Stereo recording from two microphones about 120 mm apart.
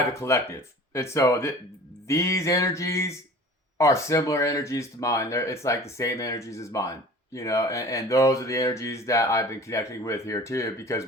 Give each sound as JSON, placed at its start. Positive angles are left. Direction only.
{"t": 0.1, "sound": "speech", "side_deg": 25}